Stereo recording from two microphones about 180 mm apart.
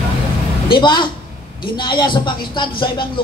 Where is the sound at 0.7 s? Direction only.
25° left (ahead or behind).